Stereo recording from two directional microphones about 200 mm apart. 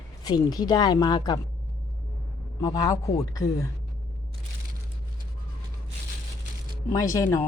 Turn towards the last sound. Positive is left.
turn(degrees=15)  # may be behind; listen again after turning